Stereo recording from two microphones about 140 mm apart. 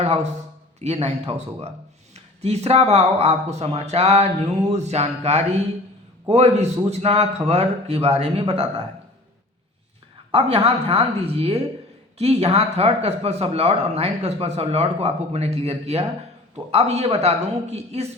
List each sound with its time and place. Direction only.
0.0 s a man's voice: 45° right (ahead or behind)
10.3 s a man's voice: 45° right (ahead or behind)